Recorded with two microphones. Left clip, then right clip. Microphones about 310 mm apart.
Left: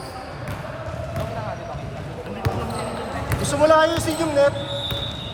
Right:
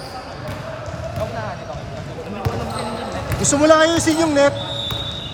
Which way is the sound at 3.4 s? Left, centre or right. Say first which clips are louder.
Right 3 dB; right.